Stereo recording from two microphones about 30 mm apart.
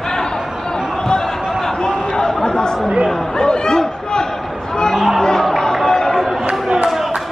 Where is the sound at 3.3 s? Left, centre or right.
Left.